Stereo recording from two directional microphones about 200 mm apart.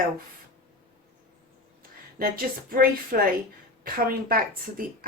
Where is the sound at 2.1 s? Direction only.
50° right (ahead or behind).